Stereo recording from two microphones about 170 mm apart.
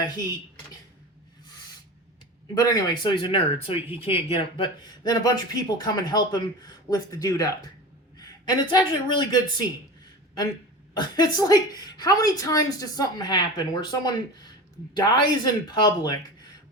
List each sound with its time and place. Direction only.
2.6 s a woman's voice: 20° left (ahead or behind)
3.8 s speech: 10° right (ahead or behind)
4.0 s a woman's voice: 30° left (ahead or behind)
10.9 s a woman's voice: 25° left (ahead or behind)